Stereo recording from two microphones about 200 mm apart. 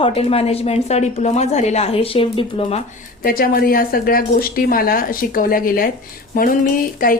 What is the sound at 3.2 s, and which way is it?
A woman's voice, 45° left (ahead or behind).